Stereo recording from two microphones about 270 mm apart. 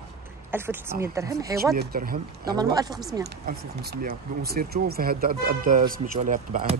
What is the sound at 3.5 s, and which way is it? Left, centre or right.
Speech, right.